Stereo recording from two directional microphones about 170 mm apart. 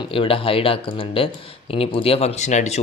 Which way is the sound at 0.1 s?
30° left (ahead or behind).